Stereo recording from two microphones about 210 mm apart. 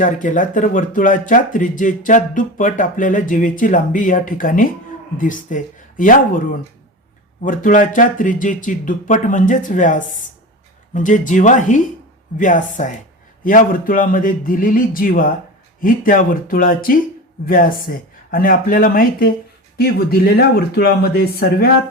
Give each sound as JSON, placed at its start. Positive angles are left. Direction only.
{"t": 0.0, "sound": "speech", "side_deg": 40}